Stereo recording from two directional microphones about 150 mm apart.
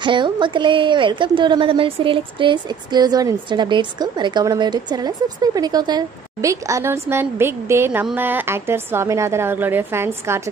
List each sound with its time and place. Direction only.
0.0 s a woman's voice: 30° right (ahead or behind); by 10.4 s 15° right (ahead or behind)